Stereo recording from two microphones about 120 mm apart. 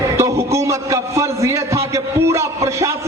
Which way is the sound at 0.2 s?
25° right (ahead or behind).